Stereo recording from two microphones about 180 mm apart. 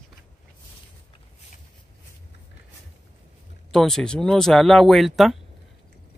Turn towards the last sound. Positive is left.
turn(degrees=0)  # may be behind; listen again after turning